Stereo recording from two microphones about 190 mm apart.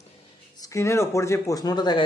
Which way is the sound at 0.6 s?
15° left (ahead or behind).